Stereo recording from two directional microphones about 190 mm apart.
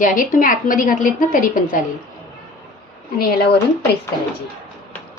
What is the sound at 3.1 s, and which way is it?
Speech, 55° left (ahead or behind).